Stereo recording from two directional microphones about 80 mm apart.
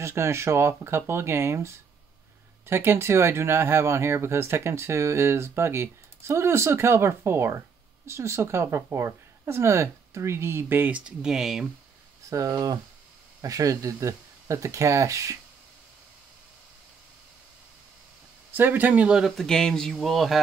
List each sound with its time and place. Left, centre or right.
0.0 s speech: right
11.1 s speech: centre
12.3 s speech: right
18.5 s speech: right; by 19.3 s centre
19.3 s speech: centre